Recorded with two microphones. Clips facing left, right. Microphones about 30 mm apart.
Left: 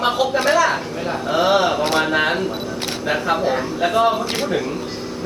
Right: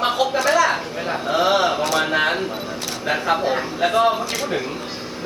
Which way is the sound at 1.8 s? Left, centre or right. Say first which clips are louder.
Left 2 dB; left.